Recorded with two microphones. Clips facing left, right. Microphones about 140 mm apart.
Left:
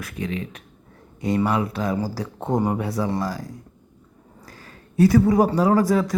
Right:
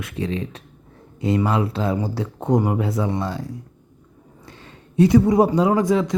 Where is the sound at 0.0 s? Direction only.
30° right (ahead or behind).